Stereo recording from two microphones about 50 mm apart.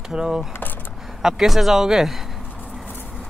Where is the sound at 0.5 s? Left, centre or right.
Left.